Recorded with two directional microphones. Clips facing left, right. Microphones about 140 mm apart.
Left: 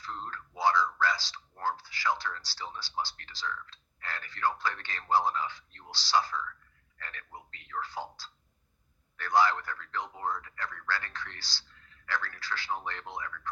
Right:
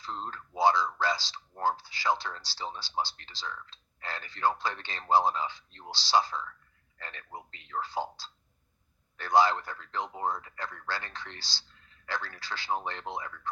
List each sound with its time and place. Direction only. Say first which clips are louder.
0.0 s speech: right 2 dB; 25° right (ahead or behind)